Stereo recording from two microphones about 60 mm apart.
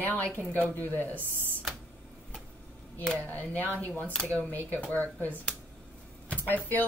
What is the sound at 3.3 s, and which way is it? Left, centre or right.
A woman's voice, left.